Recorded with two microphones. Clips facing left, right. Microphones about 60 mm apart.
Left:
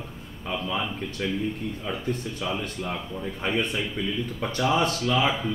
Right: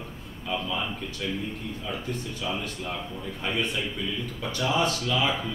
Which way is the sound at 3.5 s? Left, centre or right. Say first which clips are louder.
Left 1 dB; left.